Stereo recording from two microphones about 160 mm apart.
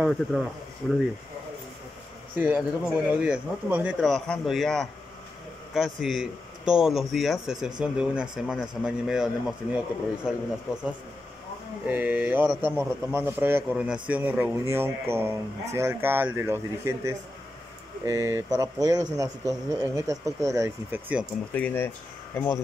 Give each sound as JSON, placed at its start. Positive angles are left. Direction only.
{"t": 0.0, "sound": "speech", "side_deg": 0}
{"t": 2.3, "sound": "speech", "side_deg": -10}
{"t": 11.8, "sound": "a man's voice", "side_deg": -10}
{"t": 21.5, "sound": "speech", "side_deg": 10}